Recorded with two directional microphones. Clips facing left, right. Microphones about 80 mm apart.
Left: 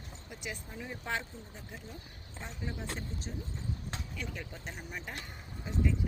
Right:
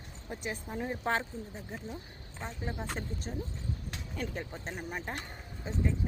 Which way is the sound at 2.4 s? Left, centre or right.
Right.